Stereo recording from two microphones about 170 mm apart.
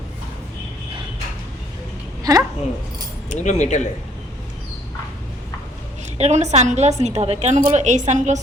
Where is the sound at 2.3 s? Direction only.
20° right (ahead or behind).